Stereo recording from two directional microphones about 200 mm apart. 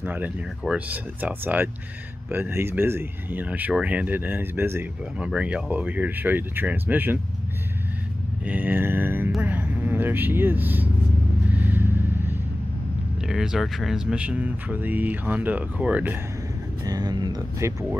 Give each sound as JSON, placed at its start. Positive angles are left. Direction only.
{"t": 0.0, "sound": "speech", "side_deg": -10}
{"t": 8.5, "sound": "speech", "side_deg": -10}
{"t": 11.5, "sound": "vehicle", "side_deg": -10}
{"t": 13.3, "sound": "speech", "side_deg": -5}
{"t": 16.8, "sound": "speech", "side_deg": -20}